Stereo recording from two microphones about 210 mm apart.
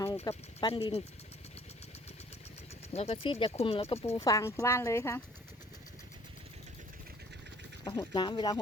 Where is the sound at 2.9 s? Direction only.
30° left (ahead or behind).